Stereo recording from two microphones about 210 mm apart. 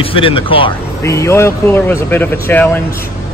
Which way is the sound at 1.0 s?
15° left (ahead or behind).